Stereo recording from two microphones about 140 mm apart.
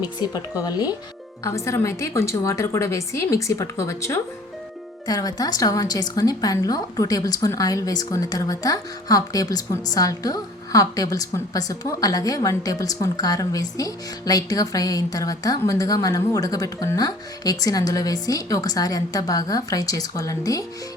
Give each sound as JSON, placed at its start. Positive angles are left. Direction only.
{"t": 0.0, "sound": "a woman's voice", "side_deg": 30}